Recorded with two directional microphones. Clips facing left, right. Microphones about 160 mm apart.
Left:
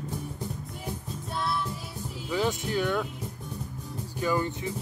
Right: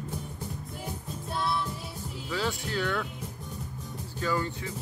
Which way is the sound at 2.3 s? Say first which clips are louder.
Left 4 dB; 20° left (ahead or behind).